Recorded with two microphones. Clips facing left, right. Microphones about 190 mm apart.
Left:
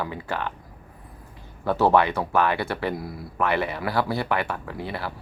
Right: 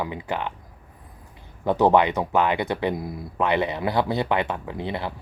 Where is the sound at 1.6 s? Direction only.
20° right (ahead or behind).